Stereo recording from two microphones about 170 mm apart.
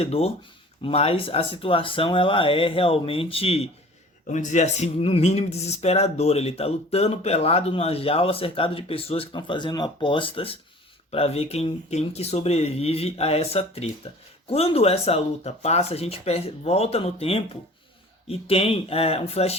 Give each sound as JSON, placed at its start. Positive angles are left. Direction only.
{"t": 0.0, "sound": "speech", "side_deg": 35}